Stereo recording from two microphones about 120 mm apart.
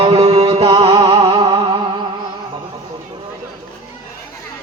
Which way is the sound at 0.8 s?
55° right (ahead or behind).